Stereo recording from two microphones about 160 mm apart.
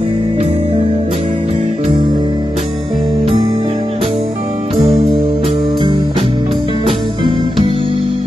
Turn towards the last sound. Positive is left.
turn(degrees=-35)  # may be behind; listen again after turning